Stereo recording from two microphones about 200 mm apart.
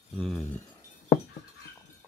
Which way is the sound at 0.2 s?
Centre (ahead or behind).